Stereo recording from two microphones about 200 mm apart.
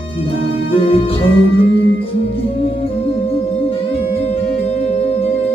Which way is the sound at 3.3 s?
30° left (ahead or behind).